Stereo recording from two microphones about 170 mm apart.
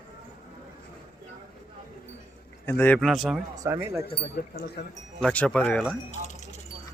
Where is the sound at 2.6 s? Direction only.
10° left (ahead or behind).